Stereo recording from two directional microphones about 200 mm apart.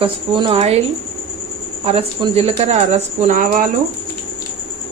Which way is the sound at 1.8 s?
30° right (ahead or behind).